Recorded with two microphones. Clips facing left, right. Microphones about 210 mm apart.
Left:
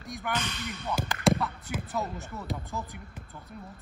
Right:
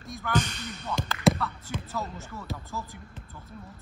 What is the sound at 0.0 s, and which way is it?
Speech, 15° left (ahead or behind).